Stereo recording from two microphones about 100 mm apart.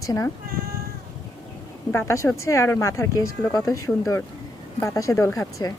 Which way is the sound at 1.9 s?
30° left (ahead or behind).